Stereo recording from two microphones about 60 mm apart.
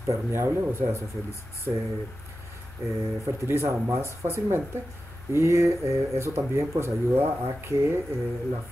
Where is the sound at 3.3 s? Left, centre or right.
Right.